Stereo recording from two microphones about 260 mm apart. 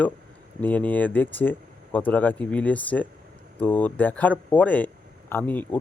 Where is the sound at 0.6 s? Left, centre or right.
Centre.